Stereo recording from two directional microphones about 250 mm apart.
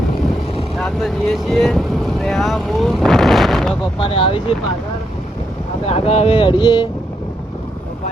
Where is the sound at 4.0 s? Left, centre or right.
Left.